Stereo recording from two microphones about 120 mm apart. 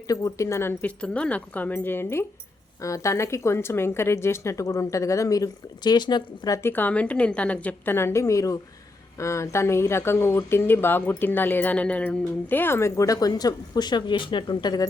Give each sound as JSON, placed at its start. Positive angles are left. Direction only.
{"t": 0.1, "sound": "speech", "side_deg": 30}
{"t": 6.6, "sound": "speech", "side_deg": 15}